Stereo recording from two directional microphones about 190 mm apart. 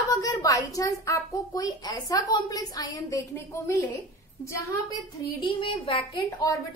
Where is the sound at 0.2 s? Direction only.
20° left (ahead or behind).